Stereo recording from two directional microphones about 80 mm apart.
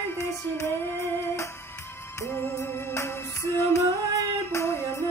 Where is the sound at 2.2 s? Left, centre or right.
Left.